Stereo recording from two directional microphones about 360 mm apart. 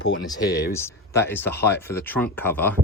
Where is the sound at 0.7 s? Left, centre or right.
Centre.